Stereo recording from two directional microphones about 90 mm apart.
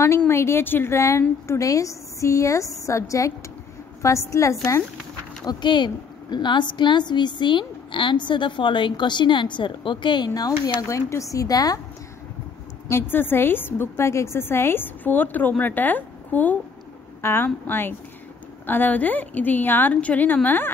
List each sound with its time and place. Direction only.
0.3 s a woman's voice: 30° left (ahead or behind)
5.4 s a woman's voice: 50° left (ahead or behind)
10.8 s a woman's voice: 35° left (ahead or behind)
13.1 s a woman's voice: 25° left (ahead or behind)